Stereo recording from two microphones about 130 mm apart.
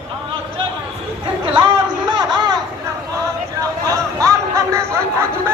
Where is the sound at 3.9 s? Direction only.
25° right (ahead or behind).